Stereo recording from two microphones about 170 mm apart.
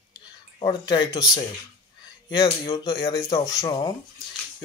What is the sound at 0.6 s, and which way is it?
Speech, 25° left (ahead or behind).